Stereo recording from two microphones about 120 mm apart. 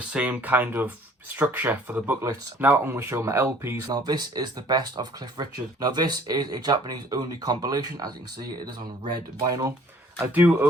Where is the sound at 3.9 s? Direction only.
35° right (ahead or behind).